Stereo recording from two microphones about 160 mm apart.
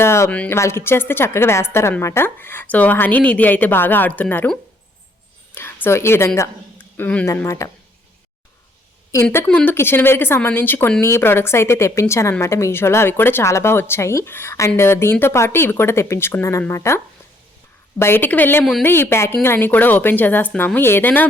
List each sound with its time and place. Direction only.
0.0 s speech: 15° left (ahead or behind)
5.5 s speech: 15° left (ahead or behind)
9.2 s speech: 10° left (ahead or behind)
18.0 s speech: 15° left (ahead or behind)